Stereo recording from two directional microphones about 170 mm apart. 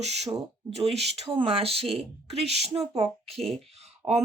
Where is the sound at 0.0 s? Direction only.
40° right (ahead or behind).